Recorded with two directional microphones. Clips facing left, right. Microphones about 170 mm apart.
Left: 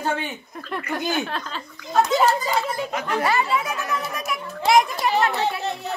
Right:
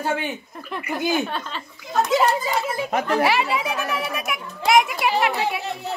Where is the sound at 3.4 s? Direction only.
10° right (ahead or behind).